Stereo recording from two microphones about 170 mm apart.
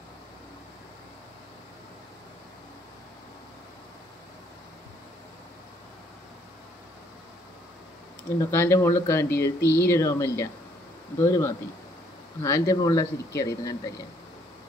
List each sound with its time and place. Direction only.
8.4 s speech: 15° left (ahead or behind)